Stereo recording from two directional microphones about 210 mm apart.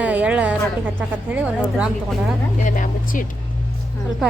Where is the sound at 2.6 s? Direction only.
40° left (ahead or behind).